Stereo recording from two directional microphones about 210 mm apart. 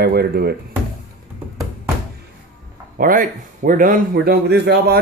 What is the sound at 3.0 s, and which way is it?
Speech, 40° right (ahead or behind).